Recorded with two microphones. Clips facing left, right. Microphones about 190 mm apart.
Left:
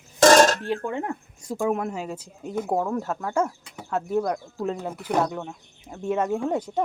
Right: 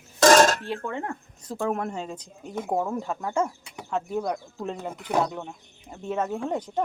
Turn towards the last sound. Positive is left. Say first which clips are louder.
# left 3 dB
turn(degrees=10)  # may be behind; listen again after turning